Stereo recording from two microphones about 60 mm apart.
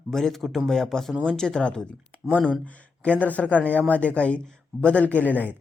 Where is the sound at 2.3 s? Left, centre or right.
Left.